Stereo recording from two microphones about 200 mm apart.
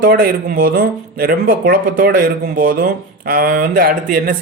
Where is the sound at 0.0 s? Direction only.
45° right (ahead or behind).